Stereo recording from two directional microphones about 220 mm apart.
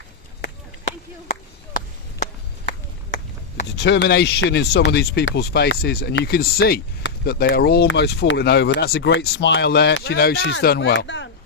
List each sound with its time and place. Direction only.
0.9 s a sound: 35° left (ahead or behind)
3.8 s speech: 50° left (ahead or behind)
9.1 s speech: 55° left (ahead or behind)